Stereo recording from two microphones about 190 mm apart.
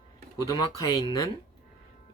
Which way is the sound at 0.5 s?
20° left (ahead or behind).